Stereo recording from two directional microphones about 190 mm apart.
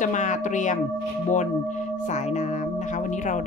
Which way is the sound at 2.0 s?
40° left (ahead or behind).